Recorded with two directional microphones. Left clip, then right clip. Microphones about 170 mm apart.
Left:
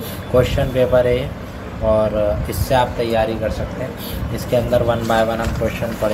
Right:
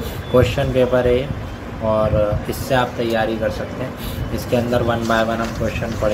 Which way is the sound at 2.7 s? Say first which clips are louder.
Left 2 dB; centre (ahead or behind).